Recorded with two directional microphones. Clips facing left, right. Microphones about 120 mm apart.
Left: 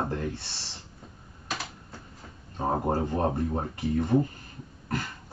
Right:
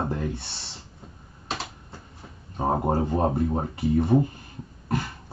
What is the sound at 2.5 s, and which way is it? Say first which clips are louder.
Speech: right 3 dB; 20° right (ahead or behind).